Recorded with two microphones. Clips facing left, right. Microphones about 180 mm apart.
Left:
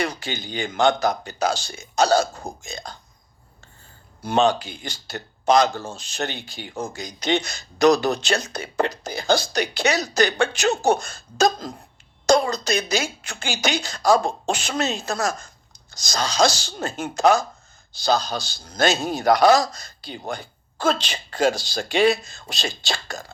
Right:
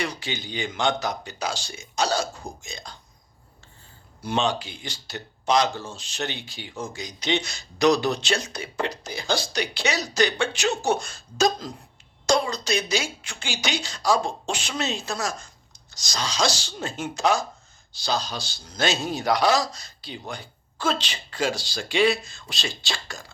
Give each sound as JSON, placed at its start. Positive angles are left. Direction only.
{"t": 0.0, "sound": "speech", "side_deg": 45}
{"t": 4.2, "sound": "speech", "side_deg": 45}